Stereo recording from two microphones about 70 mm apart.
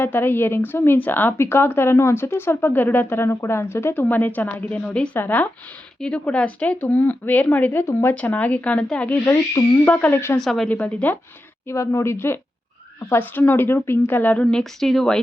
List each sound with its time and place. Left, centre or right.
0.0 s speech: left
4.1 s speech: left
8.1 s speech: left
10.3 s speech: centre
10.7 s speech: left
11.7 s speech: left
14.4 s speech: centre